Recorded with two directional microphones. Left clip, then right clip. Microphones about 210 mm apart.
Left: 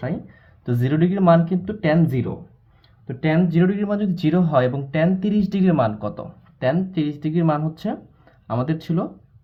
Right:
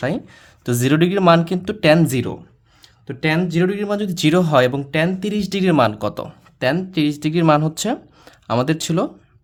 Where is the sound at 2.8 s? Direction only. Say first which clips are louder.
Right 3 dB; 25° right (ahead or behind).